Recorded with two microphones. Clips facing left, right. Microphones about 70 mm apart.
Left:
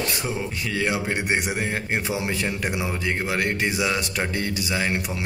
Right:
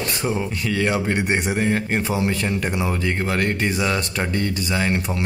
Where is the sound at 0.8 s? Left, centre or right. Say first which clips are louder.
Right 3 dB; centre.